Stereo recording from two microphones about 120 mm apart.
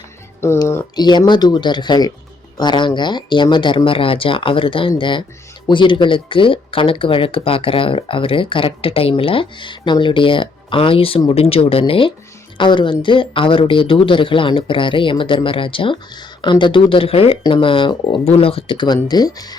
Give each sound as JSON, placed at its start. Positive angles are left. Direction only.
{"t": 0.4, "sound": "speech", "side_deg": 20}
{"t": 0.9, "sound": "speech", "side_deg": 35}